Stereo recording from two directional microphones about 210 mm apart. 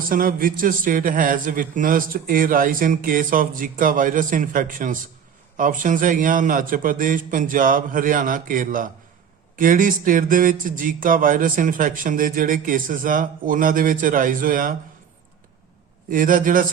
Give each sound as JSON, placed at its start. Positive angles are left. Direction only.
{"t": 0.1, "sound": "speech", "side_deg": -40}
{"t": 16.0, "sound": "speech", "side_deg": -40}